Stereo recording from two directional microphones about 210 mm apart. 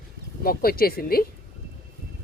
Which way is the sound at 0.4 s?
45° left (ahead or behind).